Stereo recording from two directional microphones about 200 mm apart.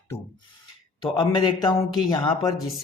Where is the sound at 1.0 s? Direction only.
25° left (ahead or behind).